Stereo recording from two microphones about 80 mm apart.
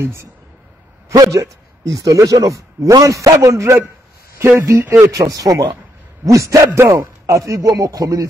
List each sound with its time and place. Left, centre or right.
0.0 s a man's voice: right
1.1 s a man's voice: right
5.0 s a man's voice: right